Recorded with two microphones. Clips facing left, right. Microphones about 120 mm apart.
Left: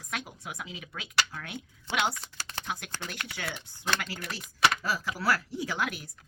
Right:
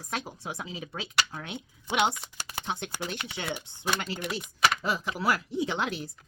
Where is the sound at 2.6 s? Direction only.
25° right (ahead or behind).